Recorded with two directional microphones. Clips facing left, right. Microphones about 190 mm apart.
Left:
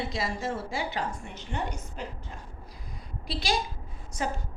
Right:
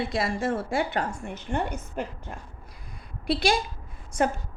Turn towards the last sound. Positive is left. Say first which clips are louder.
# right 7 dB
turn(degrees=-55)  # may be behind; listen again after turning